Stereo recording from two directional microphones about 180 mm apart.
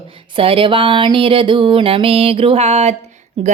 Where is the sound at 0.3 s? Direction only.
30° right (ahead or behind).